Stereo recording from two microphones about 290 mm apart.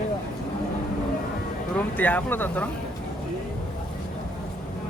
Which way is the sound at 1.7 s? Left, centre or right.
Centre.